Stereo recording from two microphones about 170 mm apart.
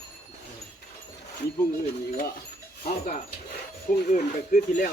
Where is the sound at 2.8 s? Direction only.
40° left (ahead or behind).